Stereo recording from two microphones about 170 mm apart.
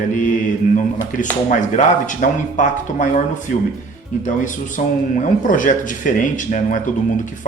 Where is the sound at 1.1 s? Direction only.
45° left (ahead or behind).